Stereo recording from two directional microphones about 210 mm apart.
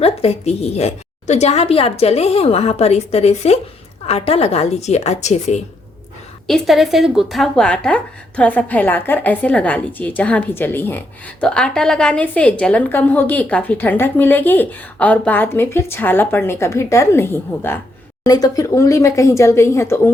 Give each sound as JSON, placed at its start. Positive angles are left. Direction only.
{"t": 0.0, "sound": "a woman's voice", "side_deg": 30}
{"t": 6.5, "sound": "speech", "side_deg": 0}